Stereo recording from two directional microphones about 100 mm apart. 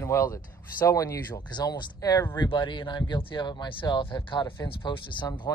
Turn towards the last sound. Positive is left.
turn(degrees=45)  # may be behind; listen again after turning